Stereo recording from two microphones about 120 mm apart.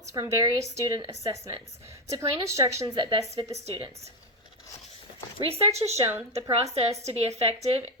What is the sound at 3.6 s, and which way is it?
Speech, 55° right (ahead or behind).